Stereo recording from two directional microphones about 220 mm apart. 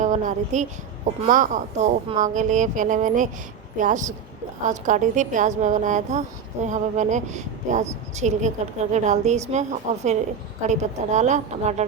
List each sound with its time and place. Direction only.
0.0 s a woman's voice: 35° right (ahead or behind)